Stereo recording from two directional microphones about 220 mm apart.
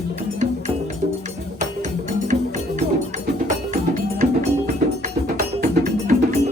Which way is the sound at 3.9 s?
35° right (ahead or behind).